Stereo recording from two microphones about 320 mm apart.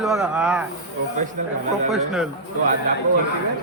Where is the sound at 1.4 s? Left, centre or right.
Right.